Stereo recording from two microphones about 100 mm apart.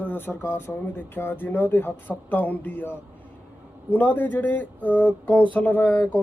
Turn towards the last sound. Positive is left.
turn(degrees=15)  # may be behind; listen again after turning